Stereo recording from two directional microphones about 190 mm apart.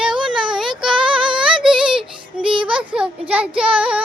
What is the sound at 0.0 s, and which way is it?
Child singing, 5° right (ahead or behind).